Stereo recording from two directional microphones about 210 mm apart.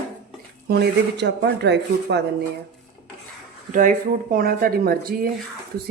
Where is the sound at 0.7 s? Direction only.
50° right (ahead or behind).